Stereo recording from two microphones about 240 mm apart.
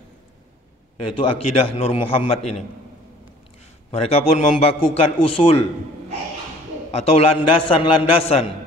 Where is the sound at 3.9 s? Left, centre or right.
Left.